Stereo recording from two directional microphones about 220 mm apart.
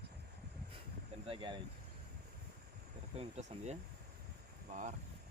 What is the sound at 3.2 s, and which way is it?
Speech, 30° right (ahead or behind).